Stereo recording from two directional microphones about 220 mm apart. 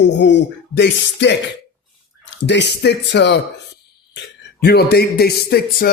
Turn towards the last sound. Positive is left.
turn(degrees=45)  # may be behind; listen again after turning